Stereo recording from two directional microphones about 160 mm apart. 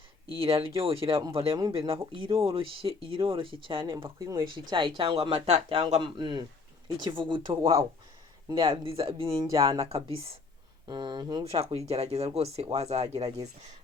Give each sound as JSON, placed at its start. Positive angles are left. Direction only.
{"t": 0.3, "sound": "speech", "side_deg": -35}
{"t": 9.5, "sound": "speech", "side_deg": -20}
{"t": 9.8, "sound": "speech", "side_deg": -40}
{"t": 10.8, "sound": "speech", "side_deg": -25}
{"t": 11.5, "sound": "speech", "side_deg": -40}